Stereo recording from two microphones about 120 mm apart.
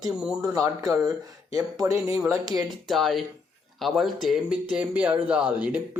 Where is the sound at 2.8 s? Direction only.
Centre (ahead or behind).